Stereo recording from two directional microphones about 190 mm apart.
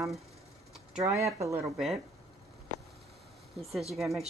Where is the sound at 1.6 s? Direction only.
Centre (ahead or behind).